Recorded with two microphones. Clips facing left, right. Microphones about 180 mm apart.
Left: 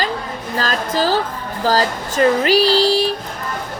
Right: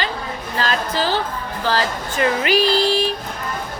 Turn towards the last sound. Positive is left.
turn(degrees=35)  # may be behind; listen again after turning